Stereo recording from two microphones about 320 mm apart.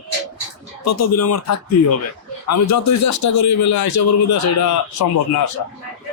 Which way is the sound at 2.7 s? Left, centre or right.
Left.